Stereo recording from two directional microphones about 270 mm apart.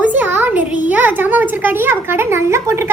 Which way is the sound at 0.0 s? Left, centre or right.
Centre.